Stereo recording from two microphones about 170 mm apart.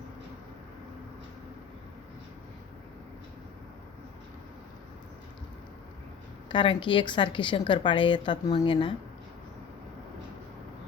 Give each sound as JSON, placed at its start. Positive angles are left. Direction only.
{"t": 6.5, "sound": "speech", "side_deg": 30}